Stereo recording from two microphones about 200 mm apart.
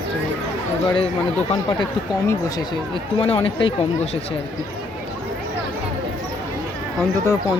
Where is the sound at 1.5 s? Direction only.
25° left (ahead or behind).